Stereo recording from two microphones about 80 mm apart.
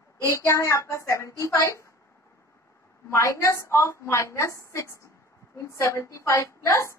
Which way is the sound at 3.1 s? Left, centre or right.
Left.